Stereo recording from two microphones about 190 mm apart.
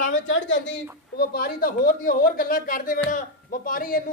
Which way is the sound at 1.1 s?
55° left (ahead or behind).